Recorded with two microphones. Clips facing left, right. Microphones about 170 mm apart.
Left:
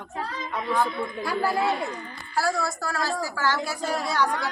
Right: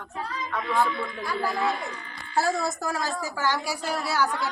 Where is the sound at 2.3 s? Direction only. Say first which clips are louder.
Right 1 dB; 20° right (ahead or behind); by 4.3 s 5° right (ahead or behind).